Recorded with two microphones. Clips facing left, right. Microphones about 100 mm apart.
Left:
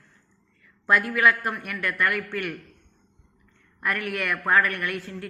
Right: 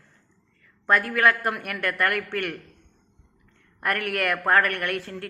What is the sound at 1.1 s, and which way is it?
A woman's voice, 55° right (ahead or behind).